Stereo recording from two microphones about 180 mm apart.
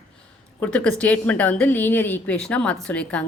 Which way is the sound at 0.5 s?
10° left (ahead or behind).